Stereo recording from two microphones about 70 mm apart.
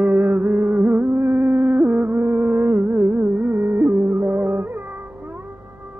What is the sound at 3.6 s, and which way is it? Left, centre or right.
Music, right.